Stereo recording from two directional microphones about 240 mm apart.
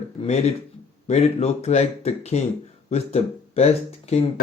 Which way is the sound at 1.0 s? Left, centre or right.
Left.